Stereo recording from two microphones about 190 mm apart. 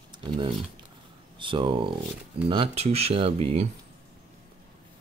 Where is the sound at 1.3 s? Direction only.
25° right (ahead or behind).